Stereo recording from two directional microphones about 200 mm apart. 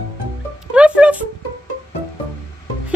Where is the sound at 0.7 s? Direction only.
5° right (ahead or behind).